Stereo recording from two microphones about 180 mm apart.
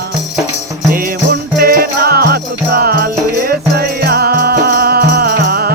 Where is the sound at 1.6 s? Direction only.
55° right (ahead or behind).